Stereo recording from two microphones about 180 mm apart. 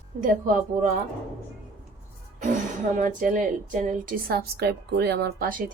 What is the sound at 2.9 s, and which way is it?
A woman's voice, 45° right (ahead or behind).